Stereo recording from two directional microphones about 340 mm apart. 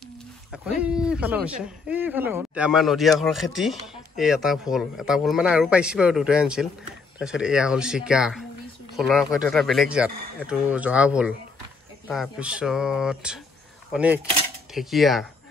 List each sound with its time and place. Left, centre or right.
0.5 s speech: centre